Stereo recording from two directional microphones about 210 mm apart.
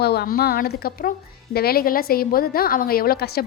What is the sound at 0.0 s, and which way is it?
A woman's voice, 50° left (ahead or behind).